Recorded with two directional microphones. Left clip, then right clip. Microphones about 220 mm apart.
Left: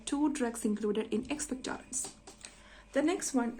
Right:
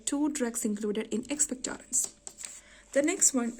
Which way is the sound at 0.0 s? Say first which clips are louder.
Right 1 dB; 35° right (ahead or behind).